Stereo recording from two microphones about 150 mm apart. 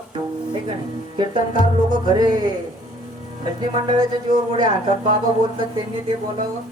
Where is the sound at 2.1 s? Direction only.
30° right (ahead or behind).